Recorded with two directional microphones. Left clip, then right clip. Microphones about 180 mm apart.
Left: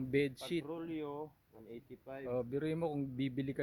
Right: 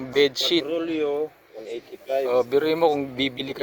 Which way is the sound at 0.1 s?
15° left (ahead or behind).